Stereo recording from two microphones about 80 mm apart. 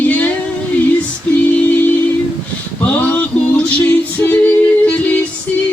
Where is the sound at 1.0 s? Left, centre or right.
Centre.